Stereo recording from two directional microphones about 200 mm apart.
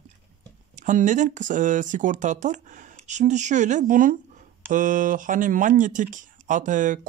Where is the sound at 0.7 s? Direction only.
40° right (ahead or behind).